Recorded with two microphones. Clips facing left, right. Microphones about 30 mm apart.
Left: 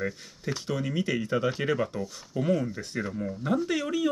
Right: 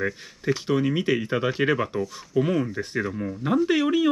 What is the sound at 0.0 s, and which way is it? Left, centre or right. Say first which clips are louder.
Speech: right 5 dB; right.